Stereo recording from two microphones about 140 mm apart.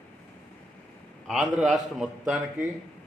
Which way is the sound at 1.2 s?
Centre (ahead or behind).